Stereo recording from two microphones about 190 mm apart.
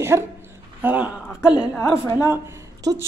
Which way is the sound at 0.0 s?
15° right (ahead or behind).